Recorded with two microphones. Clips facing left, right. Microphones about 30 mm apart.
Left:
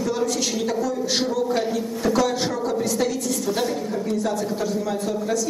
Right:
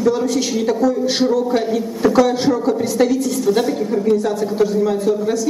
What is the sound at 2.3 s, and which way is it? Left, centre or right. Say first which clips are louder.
A woman's voice: right 7 dB; centre.